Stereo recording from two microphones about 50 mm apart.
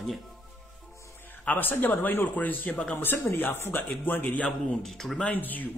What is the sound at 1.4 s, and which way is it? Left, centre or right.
A man's voice, left.